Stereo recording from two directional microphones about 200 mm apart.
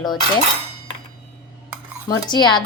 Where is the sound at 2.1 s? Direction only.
20° left (ahead or behind).